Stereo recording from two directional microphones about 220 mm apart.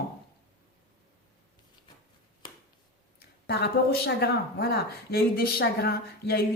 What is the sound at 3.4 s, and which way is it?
Speech, 45° left (ahead or behind).